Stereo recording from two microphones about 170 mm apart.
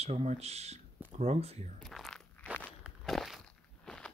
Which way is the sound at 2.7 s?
5° right (ahead or behind).